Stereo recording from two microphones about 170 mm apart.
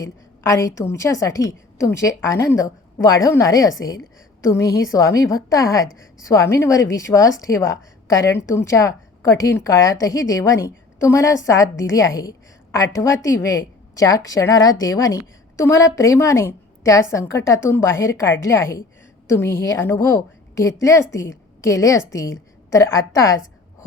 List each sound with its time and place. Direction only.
0.0 s a woman's voice: 20° left (ahead or behind)